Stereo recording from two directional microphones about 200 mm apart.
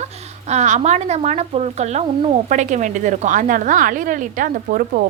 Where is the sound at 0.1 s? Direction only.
35° right (ahead or behind).